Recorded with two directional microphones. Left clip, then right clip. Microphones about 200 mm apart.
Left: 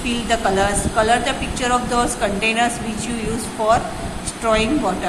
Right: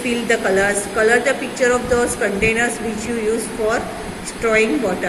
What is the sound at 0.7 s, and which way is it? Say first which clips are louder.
A woman's voice: right 1 dB; 10° left (ahead or behind).